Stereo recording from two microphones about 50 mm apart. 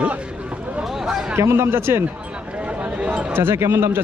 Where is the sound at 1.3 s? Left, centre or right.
Right.